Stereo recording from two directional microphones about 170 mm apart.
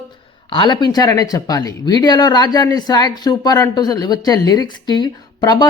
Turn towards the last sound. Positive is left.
turn(degrees=25)  # may be behind; listen again after turning